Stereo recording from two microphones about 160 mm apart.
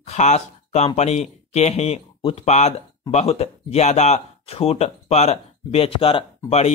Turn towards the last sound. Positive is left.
turn(degrees=40)  # may be behind; listen again after turning